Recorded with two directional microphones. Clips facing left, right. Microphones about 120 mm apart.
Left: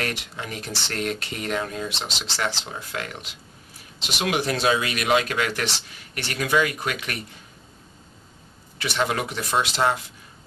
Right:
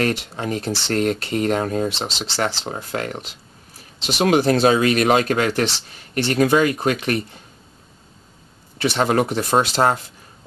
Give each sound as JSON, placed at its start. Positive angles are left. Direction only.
{"t": 0.0, "sound": "speech", "side_deg": -35}
{"t": 8.7, "sound": "speech", "side_deg": -35}